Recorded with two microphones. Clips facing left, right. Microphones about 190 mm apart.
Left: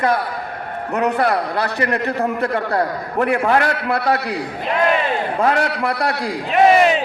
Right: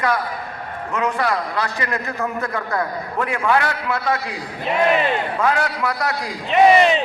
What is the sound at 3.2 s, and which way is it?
Speech, 60° left (ahead or behind).